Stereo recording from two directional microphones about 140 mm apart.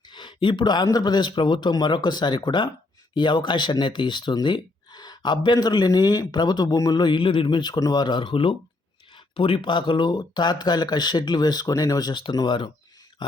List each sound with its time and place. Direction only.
0.1 s speech: 35° left (ahead or behind)